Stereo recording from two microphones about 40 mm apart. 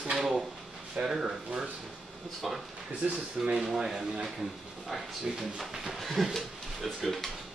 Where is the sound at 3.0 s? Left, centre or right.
Right.